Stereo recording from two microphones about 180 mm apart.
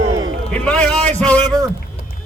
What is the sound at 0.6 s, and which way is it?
Speech, 5° left (ahead or behind).